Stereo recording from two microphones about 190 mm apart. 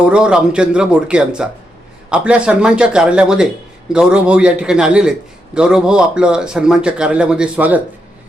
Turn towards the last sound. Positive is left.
turn(degrees=-5)  # may be behind; listen again after turning